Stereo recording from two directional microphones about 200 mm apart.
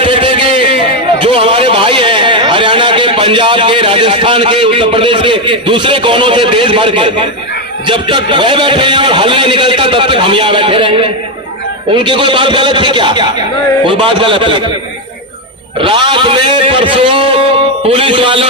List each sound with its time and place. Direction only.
0.0 s a sound: 25° right (ahead or behind)
7.9 s speech: 25° right (ahead or behind)
15.8 s speech: 25° right (ahead or behind)